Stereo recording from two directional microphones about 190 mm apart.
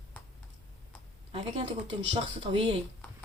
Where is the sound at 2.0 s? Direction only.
30° right (ahead or behind).